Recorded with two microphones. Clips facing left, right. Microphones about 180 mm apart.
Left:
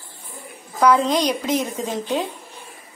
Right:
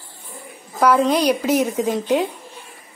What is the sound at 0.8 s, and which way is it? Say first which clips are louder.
A woman's voice: right 1 dB; 5° right (ahead or behind).